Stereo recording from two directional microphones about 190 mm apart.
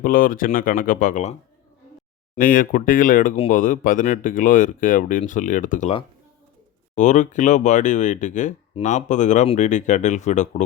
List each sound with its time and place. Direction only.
0.0 s speech: 45° left (ahead or behind)
6.9 s speech: 40° left (ahead or behind)